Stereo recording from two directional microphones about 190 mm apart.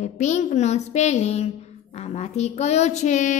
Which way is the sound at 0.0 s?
40° left (ahead or behind).